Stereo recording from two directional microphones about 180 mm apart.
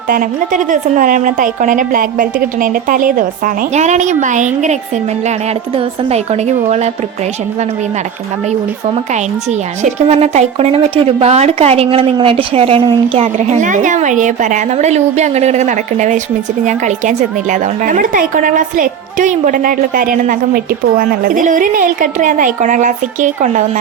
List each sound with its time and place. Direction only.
0.1 s a woman's voice: 50° right (ahead or behind)
9.5 s a woman's voice: 40° right (ahead or behind)